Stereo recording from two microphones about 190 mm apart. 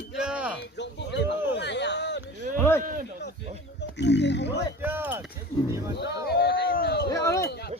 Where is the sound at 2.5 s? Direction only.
10° left (ahead or behind).